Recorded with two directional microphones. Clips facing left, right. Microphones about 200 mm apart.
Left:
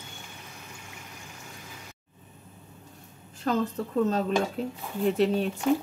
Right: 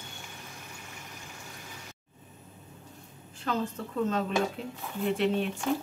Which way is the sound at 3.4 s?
40° left (ahead or behind).